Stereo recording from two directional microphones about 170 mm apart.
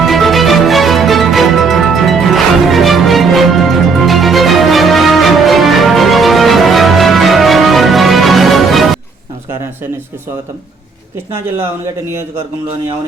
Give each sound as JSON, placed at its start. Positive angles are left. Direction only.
{"t": 0.0, "sound": "music", "side_deg": 0}